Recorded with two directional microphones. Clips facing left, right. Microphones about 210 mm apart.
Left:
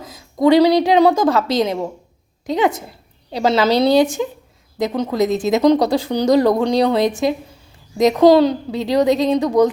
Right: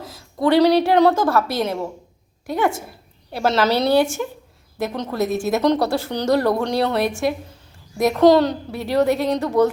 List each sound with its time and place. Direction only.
0.0 s a woman's voice: 20° left (ahead or behind)